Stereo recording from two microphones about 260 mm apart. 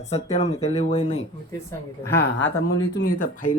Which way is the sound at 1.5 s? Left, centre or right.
Centre.